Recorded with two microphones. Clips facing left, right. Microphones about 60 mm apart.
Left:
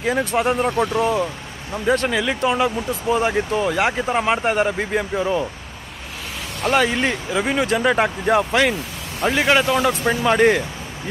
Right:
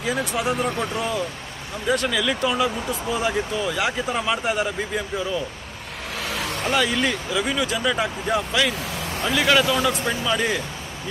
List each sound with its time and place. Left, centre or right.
0.0 s speech: left
6.9 s speech: left
9.2 s speech: left
10.2 s speech: left